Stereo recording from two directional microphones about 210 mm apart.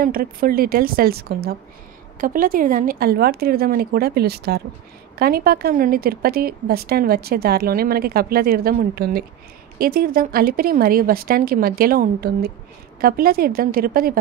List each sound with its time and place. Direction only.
0.0 s a woman's voice: 45° right (ahead or behind)